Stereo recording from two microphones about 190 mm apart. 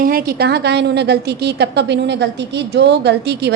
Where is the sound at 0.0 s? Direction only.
50° right (ahead or behind).